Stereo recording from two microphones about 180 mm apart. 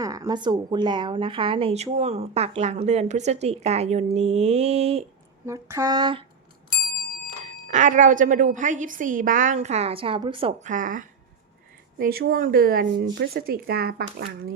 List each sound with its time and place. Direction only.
0.0 s speech: 20° right (ahead or behind); by 5.0 s 35° right (ahead or behind)
5.5 s a sound: 15° right (ahead or behind)
7.7 s a woman's voice: 40° right (ahead or behind)
10.7 s a woman's voice: 45° right (ahead or behind)